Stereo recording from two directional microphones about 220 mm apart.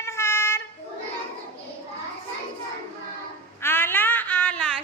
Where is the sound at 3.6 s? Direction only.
10° left (ahead or behind).